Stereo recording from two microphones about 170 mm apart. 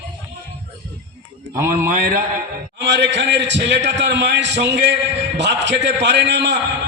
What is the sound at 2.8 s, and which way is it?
A man's voice, 90° right.